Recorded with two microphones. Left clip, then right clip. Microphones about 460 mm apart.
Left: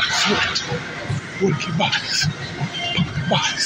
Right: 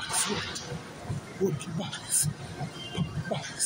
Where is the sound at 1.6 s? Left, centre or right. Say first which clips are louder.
Left 17 dB; right.